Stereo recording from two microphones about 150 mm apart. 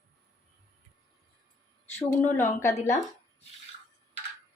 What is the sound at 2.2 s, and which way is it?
Speech, 15° left (ahead or behind).